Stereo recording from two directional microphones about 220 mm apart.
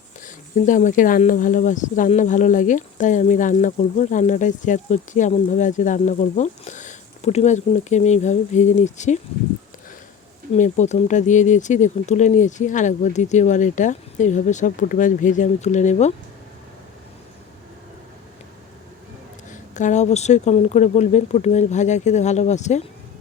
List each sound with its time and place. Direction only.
0.2 s speech: 35° left (ahead or behind)
10.5 s speech: 30° left (ahead or behind)
19.5 s speech: 35° left (ahead or behind)